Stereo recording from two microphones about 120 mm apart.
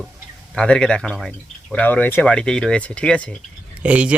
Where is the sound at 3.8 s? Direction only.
10° right (ahead or behind).